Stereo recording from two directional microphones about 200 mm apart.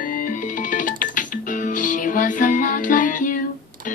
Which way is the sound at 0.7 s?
40° left (ahead or behind).